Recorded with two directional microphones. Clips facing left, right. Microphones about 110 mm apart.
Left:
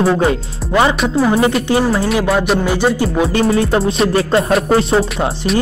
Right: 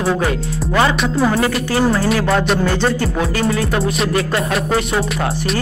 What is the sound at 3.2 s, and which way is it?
Music, 25° left (ahead or behind).